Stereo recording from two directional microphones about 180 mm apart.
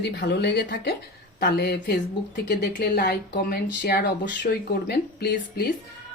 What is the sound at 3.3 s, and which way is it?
Speech, 60° left (ahead or behind).